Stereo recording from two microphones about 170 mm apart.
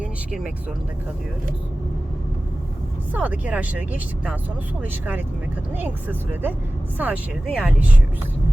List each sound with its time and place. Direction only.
0.0 s speech: 5° right (ahead or behind)
3.1 s speech: 10° right (ahead or behind)